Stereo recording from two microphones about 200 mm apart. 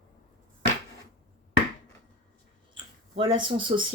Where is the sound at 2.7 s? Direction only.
25° right (ahead or behind).